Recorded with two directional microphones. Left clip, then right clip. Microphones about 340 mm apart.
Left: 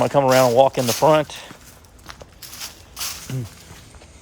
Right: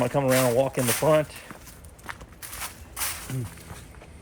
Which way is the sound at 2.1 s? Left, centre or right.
Centre.